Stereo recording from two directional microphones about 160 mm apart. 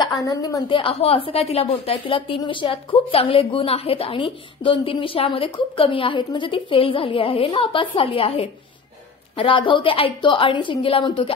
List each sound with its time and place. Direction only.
0.0 s a woman's voice: 20° left (ahead or behind)